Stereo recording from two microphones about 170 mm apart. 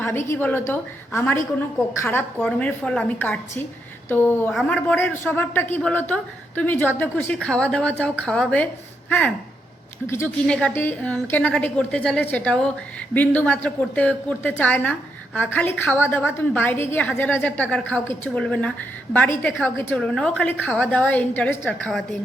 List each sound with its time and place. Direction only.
0.0 s a woman's voice: 15° left (ahead or behind)